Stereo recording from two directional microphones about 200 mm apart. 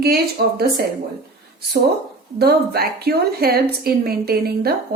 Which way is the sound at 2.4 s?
50° right (ahead or behind).